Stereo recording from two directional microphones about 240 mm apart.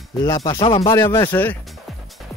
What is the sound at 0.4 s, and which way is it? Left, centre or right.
Speech, left.